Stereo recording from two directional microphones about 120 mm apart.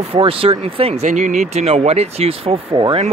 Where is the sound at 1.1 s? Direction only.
90° right; by 2.5 s 55° right (ahead or behind).